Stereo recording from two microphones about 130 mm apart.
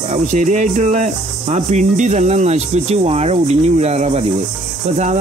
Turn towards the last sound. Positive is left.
turn(degrees=-55)  # may be behind; listen again after turning